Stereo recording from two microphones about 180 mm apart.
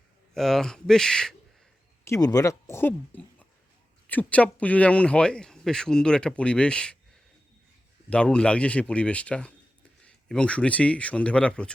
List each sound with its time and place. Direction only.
0.3 s speech: centre (ahead or behind)
2.0 s speech: 20° left (ahead or behind)
8.1 s speech: 5° left (ahead or behind)